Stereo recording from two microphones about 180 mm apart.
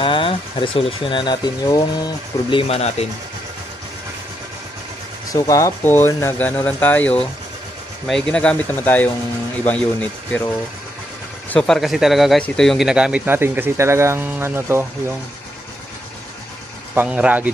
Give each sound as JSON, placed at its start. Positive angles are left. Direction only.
{"t": 0.0, "sound": "speech", "side_deg": 30}
{"t": 2.7, "sound": "rub", "side_deg": 35}
{"t": 5.3, "sound": "speech", "side_deg": 15}
{"t": 16.9, "sound": "speech", "side_deg": -10}